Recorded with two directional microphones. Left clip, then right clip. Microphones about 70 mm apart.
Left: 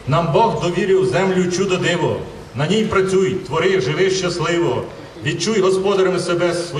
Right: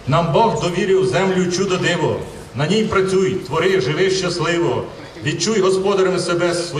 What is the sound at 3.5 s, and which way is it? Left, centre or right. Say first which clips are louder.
Speech: even; centre.